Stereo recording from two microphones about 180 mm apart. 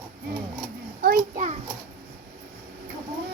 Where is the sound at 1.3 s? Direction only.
45° right (ahead or behind).